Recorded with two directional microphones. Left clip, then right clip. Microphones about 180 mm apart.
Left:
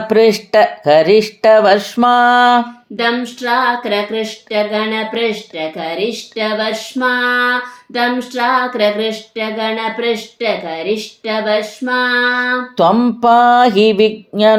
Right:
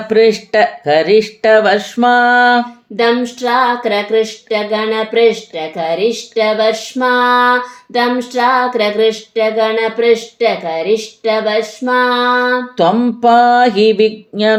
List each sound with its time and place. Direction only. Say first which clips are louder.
0.1 s speech: even; 25° left (ahead or behind)
3.0 s female singing: right 4 dB; 45° right (ahead or behind)
12.7 s speech: left 1 dB; 25° left (ahead or behind)